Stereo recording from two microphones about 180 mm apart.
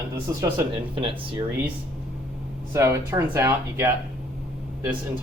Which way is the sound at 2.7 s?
15° right (ahead or behind).